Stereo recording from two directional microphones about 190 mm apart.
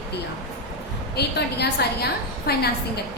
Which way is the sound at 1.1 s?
60° left (ahead or behind).